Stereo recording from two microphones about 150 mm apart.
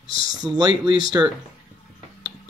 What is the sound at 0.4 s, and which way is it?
Speech, 30° right (ahead or behind).